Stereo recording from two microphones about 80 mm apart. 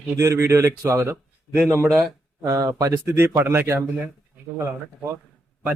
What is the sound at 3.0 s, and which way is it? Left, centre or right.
Speech, right.